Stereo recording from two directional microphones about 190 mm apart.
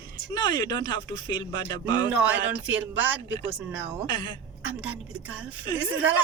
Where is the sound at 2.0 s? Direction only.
10° right (ahead or behind).